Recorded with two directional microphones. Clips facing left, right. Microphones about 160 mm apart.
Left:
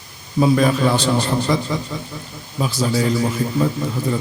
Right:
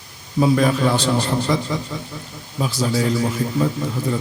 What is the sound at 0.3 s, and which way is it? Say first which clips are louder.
Speech: left 1 dB; 10° left (ahead or behind).